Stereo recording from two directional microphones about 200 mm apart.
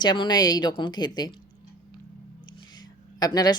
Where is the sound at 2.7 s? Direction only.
20° left (ahead or behind).